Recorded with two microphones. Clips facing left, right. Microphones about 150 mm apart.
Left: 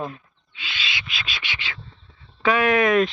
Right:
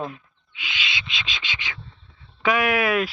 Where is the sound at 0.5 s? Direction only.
15° right (ahead or behind).